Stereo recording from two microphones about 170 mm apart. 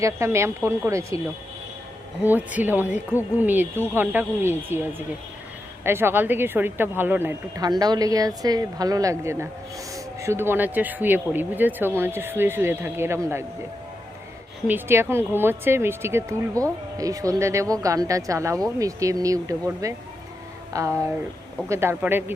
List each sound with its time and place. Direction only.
0.0 s speech: 15° right (ahead or behind)
2.2 s speech: 10° right (ahead or behind)
14.7 s speech: 15° right (ahead or behind)